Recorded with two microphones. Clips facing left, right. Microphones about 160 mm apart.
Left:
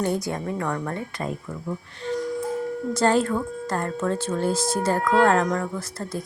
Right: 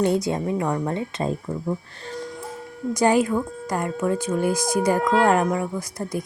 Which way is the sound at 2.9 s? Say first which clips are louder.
Right 2 dB; 15° right (ahead or behind).